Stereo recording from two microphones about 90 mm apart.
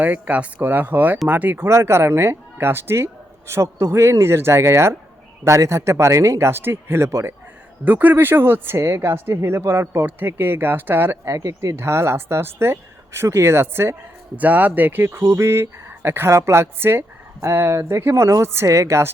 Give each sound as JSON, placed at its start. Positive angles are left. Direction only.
{"t": 0.0, "sound": "speech", "side_deg": -20}
{"t": 1.6, "sound": "speech", "side_deg": -30}
{"t": 7.9, "sound": "speech", "side_deg": -20}